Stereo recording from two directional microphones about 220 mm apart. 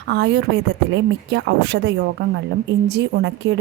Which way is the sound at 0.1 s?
50° right (ahead or behind).